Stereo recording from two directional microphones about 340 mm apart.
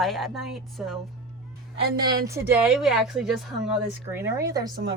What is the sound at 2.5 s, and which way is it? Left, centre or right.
A woman's voice, centre.